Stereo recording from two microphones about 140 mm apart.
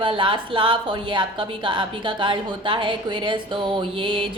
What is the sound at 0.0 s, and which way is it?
A woman's voice, 35° right (ahead or behind).